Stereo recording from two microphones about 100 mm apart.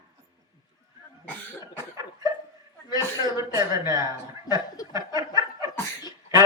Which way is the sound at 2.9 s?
35° right (ahead or behind).